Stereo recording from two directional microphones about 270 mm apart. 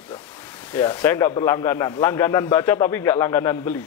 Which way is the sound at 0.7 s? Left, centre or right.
Centre.